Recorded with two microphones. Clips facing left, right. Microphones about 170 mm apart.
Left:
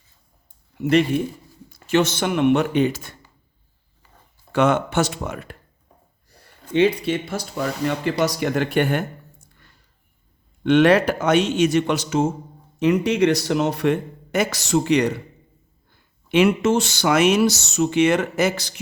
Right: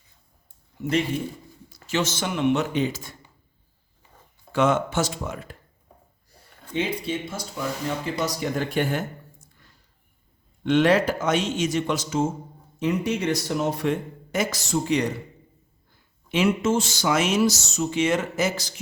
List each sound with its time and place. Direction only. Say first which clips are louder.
0.8 s speech: left 7 dB; 70° left (ahead or behind)
1.7 s speech: left 7 dB; 60° left (ahead or behind)
4.5 s speech: left 3 dB; 65° left (ahead or behind)
6.7 s speech: left 8 dB; 70° left (ahead or behind)
16.3 s speech: left 5 dB; 60° left (ahead or behind)